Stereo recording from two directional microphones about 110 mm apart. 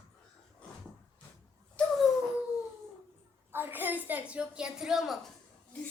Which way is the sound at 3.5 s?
20° right (ahead or behind).